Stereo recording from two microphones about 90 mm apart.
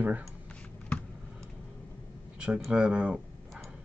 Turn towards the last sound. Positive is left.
turn(degrees=-10)  # may be behind; listen again after turning